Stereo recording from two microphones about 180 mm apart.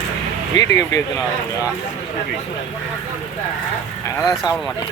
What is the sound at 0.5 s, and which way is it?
Speech, 20° left (ahead or behind).